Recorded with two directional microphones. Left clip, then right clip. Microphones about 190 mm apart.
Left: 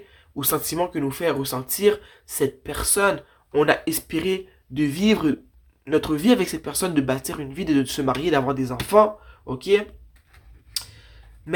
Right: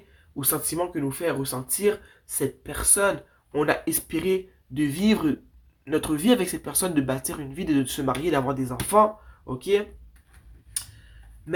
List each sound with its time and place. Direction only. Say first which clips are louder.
0.3 s speech: left 4 dB; 30° left (ahead or behind)